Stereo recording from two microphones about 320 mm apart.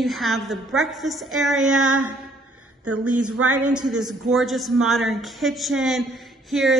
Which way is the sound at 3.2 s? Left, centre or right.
Right.